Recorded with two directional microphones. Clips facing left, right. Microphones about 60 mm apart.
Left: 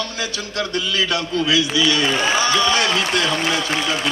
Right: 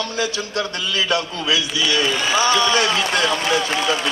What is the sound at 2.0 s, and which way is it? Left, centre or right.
Speech, left.